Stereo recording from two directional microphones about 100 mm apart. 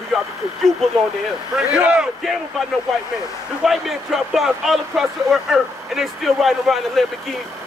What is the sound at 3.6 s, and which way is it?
A man's voice, centre (ahead or behind).